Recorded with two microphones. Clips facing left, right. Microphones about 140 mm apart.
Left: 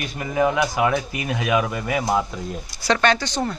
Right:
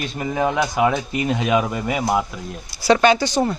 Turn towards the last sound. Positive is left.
turn(degrees=-10)  # may be behind; listen again after turning